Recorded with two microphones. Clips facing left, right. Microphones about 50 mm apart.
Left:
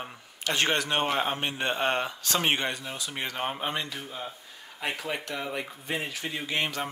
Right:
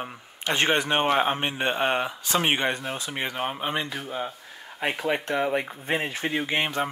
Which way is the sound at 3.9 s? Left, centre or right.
Right.